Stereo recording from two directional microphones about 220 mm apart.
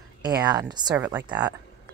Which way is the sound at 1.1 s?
5° right (ahead or behind).